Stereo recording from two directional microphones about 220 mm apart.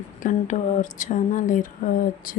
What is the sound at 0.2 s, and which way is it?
Speech, 35° left (ahead or behind).